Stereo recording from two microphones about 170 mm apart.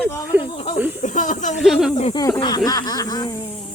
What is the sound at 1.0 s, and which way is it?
Snake, 50° left (ahead or behind).